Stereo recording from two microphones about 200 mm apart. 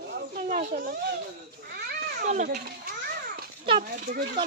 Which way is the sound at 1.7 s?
45° right (ahead or behind).